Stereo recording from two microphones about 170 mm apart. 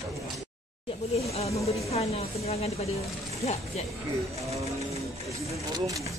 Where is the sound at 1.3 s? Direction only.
35° left (ahead or behind).